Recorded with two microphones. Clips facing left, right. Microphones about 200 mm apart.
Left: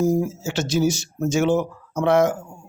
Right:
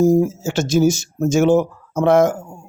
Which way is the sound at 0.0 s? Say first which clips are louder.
Right 6 dB; 45° right (ahead or behind).